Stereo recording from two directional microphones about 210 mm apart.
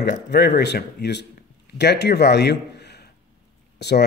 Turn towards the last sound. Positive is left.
turn(degrees=55)  # may be behind; listen again after turning